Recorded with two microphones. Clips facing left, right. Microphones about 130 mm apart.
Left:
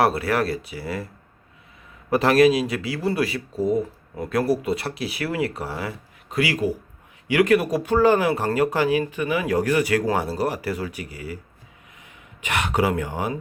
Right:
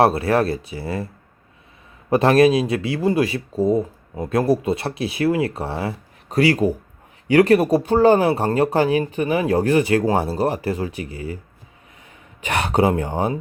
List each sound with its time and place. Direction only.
0.0 s speech: 25° right (ahead or behind)
2.0 s speech: 25° right (ahead or behind)
12.4 s speech: 35° right (ahead or behind)